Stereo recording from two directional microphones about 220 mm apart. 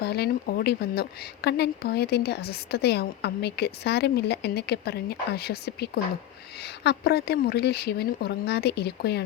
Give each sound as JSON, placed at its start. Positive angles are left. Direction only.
{"t": 0.0, "sound": "speech", "side_deg": 45}